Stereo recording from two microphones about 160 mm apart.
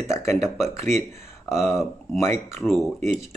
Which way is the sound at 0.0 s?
15° left (ahead or behind).